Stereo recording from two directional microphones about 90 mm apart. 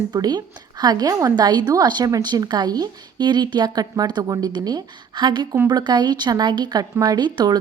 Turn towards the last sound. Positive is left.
turn(degrees=-50)  # may be behind; listen again after turning